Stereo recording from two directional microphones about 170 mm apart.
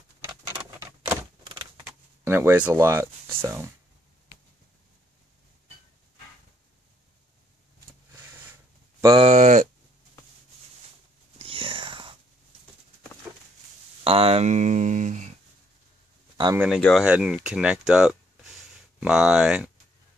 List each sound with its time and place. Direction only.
0.3 s typewriter: 15° right (ahead or behind)
1.9 s speech: 15° right (ahead or behind)
9.2 s speech: 45° right (ahead or behind)
11.3 s whispering: 30° right (ahead or behind)
13.3 s a sound: 10° right (ahead or behind)
14.0 s a sound: 35° right (ahead or behind)
16.5 s speech: 5° right (ahead or behind)